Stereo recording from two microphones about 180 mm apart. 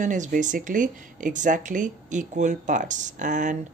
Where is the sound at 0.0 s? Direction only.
45° right (ahead or behind).